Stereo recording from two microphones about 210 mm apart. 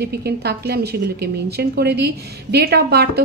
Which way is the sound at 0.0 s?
50° right (ahead or behind).